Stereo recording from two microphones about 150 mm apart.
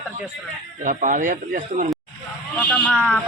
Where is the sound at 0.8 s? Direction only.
60° right (ahead or behind).